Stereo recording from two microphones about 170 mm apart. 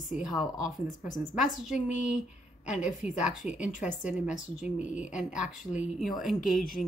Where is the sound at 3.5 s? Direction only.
45° left (ahead or behind).